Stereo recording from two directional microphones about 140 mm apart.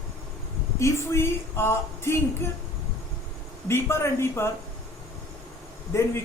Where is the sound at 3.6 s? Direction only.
20° left (ahead or behind).